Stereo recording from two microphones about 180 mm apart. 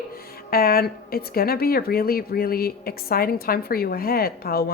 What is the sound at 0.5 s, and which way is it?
A woman's voice, 55° left (ahead or behind).